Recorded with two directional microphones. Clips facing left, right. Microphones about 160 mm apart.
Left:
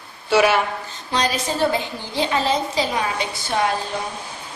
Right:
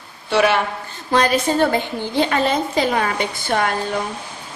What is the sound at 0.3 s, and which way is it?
Speech, 5° left (ahead or behind).